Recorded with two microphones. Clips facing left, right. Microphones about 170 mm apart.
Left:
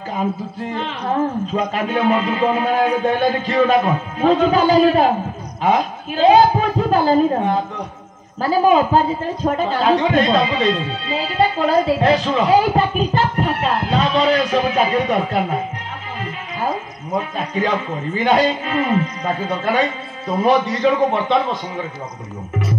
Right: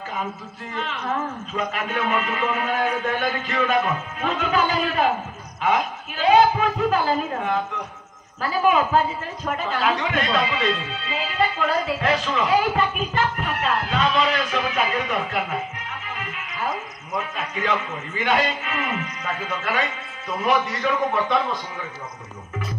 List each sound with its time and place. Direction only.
0.1 s a man's voice: 35° left (ahead or behind)